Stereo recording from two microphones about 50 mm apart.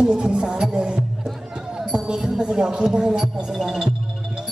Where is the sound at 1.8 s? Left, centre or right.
Centre.